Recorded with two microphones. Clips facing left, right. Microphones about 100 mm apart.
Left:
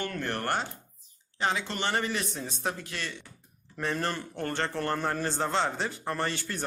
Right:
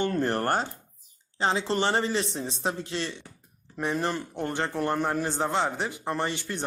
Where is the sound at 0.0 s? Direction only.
30° right (ahead or behind).